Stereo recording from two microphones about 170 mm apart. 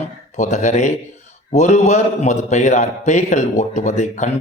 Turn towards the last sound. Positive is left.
turn(degrees=45)  # may be behind; listen again after turning